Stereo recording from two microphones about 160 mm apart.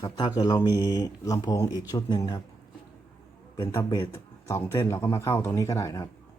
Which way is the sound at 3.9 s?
25° left (ahead or behind).